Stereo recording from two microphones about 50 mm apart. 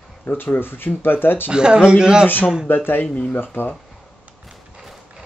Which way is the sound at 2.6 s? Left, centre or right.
Left.